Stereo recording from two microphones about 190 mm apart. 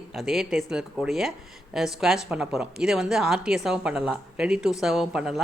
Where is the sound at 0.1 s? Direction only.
Centre (ahead or behind).